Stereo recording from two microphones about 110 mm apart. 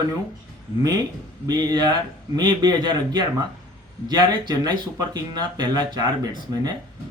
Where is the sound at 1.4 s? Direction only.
40° right (ahead or behind).